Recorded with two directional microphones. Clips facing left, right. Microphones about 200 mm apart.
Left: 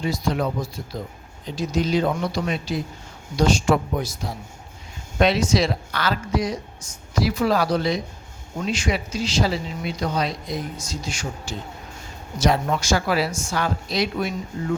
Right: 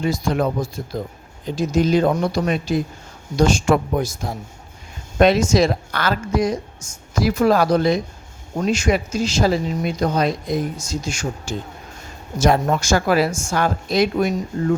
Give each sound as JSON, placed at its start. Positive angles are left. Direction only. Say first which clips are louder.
{"t": 0.0, "sound": "speech", "louder": "right 4 dB", "side_deg": -50}